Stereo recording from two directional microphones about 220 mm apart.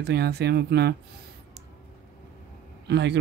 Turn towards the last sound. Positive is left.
turn(degrees=-50)  # may be behind; listen again after turning